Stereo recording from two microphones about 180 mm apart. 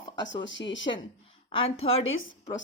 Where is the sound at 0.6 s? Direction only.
90° left.